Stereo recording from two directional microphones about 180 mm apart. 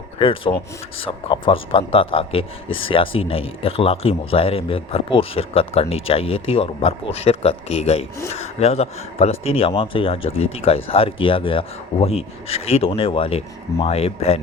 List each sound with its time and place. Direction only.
0.2 s speech: 30° left (ahead or behind)